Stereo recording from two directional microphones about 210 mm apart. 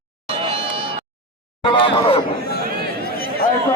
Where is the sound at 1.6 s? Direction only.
25° left (ahead or behind).